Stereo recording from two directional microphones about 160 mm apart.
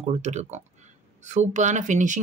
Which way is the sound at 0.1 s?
45° right (ahead or behind).